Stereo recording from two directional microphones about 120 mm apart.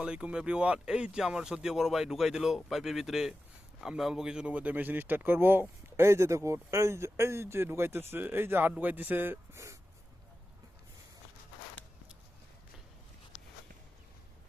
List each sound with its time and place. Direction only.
0.0 s speech: 10° right (ahead or behind)